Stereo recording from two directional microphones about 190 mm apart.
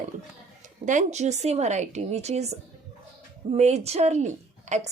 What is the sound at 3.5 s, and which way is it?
Speech, 35° right (ahead or behind).